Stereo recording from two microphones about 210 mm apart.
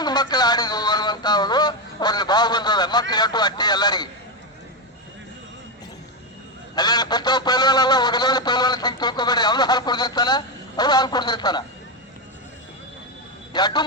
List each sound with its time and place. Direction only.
0.0 s speech: 20° left (ahead or behind)
6.7 s a sound: 20° left (ahead or behind)
13.5 s a man's voice: 20° left (ahead or behind)